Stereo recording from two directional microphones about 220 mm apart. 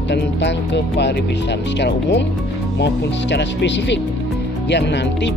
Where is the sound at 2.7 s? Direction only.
50° left (ahead or behind).